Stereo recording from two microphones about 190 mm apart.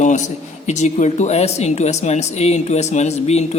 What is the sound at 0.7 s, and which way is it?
Speech, 40° left (ahead or behind).